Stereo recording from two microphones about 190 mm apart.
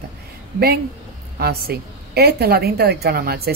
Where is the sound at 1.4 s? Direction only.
55° right (ahead or behind).